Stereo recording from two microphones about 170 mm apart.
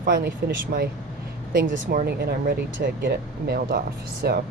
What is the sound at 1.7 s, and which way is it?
Speech, 75° right (ahead or behind).